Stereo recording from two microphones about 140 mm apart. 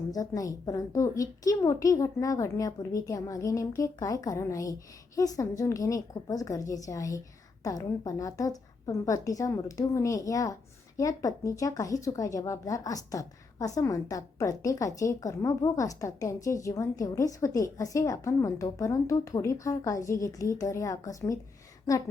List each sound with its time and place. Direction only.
0.1 s a woman's voice: 25° left (ahead or behind)